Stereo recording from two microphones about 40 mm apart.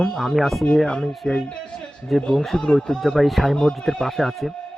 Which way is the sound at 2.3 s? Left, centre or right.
Centre.